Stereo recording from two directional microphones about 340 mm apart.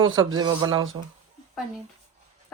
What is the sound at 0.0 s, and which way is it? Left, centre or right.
Speech, centre.